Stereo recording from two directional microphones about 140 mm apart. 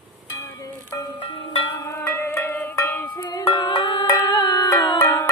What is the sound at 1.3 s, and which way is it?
Zither, 40° left (ahead or behind).